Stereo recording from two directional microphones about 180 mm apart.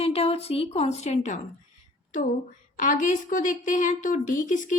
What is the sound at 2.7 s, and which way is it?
A woman's voice, 45° left (ahead or behind).